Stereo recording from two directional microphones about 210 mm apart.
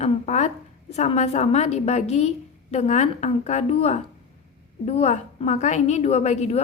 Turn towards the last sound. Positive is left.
turn(degrees=30)  # may be behind; listen again after turning